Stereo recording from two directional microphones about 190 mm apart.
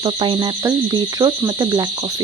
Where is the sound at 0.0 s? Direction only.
25° right (ahead or behind).